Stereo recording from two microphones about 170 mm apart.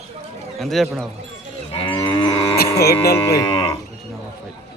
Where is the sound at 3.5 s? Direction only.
30° left (ahead or behind).